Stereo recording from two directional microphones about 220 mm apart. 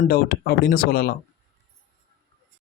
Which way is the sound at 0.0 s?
45° left (ahead or behind).